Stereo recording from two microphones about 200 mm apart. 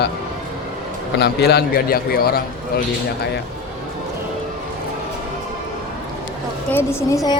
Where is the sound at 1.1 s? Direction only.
55° left (ahead or behind).